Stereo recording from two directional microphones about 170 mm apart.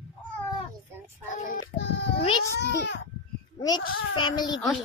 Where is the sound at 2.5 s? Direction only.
85° left.